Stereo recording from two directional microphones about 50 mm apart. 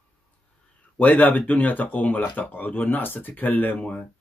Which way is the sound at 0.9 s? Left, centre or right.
Left.